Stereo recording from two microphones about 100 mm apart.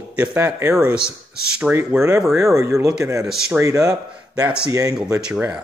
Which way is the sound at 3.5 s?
30° right (ahead or behind).